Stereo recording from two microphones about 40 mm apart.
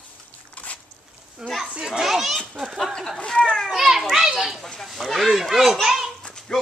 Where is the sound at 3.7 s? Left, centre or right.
Centre.